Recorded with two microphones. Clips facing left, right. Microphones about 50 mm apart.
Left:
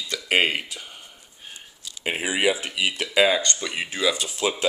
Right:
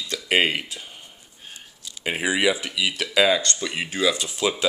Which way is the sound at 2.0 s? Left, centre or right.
Centre.